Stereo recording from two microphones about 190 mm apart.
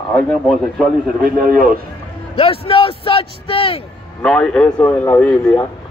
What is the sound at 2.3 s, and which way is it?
A man's voice, 30° left (ahead or behind).